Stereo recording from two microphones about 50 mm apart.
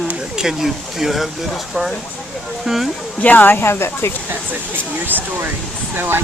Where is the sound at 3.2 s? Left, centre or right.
Left.